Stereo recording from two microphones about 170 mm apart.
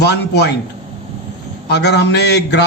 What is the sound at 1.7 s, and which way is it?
Speech, 80° left.